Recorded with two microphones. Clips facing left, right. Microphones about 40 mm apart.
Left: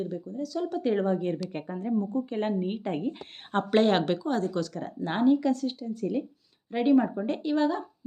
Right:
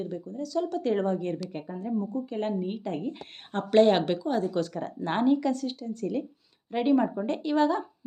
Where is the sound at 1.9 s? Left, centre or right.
Left.